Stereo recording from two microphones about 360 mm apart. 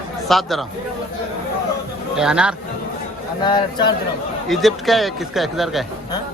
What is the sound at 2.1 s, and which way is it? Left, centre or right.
Speech, centre.